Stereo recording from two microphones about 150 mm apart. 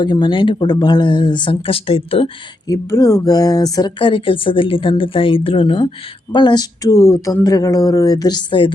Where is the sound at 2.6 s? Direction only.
20° left (ahead or behind).